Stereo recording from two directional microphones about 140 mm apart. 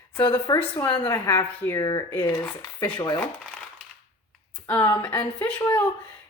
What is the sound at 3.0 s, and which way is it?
Speech, 30° left (ahead or behind).